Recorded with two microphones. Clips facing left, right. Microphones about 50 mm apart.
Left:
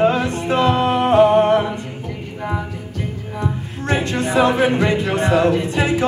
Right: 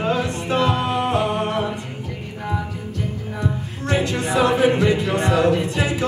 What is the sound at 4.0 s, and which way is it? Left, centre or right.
Music, left.